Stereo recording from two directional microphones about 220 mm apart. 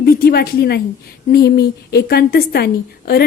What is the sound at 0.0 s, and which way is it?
A woman's voice, 45° left (ahead or behind).